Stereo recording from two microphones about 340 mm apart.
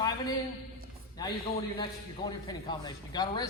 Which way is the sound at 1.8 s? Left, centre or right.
Centre.